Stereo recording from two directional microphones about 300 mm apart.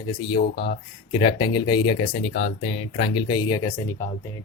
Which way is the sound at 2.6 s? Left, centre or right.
Centre.